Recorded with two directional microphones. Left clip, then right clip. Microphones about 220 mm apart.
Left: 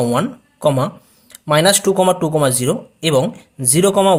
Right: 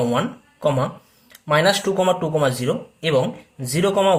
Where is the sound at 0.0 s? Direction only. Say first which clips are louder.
Left 3 dB; 35° left (ahead or behind).